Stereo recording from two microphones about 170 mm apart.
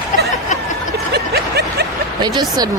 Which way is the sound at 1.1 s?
70° right (ahead or behind).